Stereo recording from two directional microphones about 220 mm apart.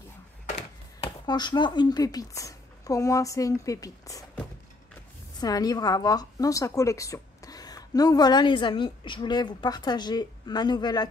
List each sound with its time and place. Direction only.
1.0 s speech: 20° left (ahead or behind)
5.4 s a woman's voice: 15° left (ahead or behind)